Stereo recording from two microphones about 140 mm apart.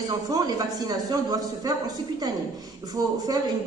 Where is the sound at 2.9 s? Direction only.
25° right (ahead or behind).